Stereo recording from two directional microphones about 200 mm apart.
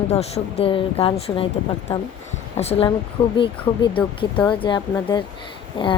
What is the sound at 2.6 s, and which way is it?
Speech, 30° left (ahead or behind).